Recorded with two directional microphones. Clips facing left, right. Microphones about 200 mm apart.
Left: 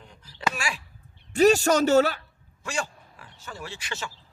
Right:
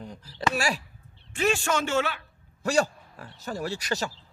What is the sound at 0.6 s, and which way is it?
Speech, 40° right (ahead or behind).